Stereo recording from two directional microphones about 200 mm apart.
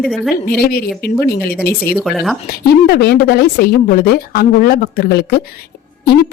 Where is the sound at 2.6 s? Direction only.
50° left (ahead or behind).